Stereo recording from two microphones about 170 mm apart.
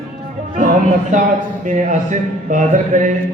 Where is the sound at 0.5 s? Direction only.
50° right (ahead or behind).